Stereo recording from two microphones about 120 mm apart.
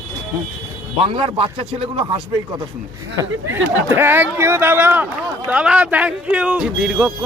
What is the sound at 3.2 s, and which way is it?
Speech, 20° right (ahead or behind).